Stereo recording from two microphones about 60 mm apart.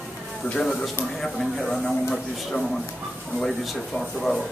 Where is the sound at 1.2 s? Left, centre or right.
Centre.